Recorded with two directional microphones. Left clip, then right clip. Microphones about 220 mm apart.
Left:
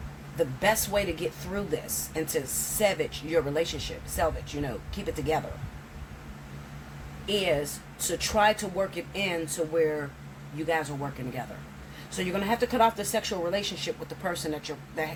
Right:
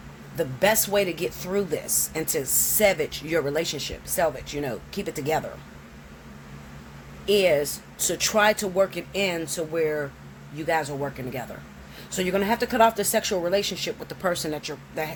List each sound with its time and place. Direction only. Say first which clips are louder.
0.3 s speech: right 3 dB; 50° right (ahead or behind)
7.3 s speech: right 7 dB; 50° right (ahead or behind)
10.7 s speech: right 4 dB; 50° right (ahead or behind)